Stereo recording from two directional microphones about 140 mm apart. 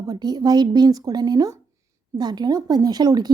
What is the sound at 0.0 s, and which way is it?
Speech, 30° right (ahead or behind).